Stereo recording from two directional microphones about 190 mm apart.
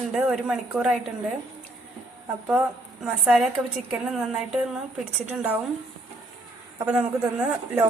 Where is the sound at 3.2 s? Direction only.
Centre (ahead or behind).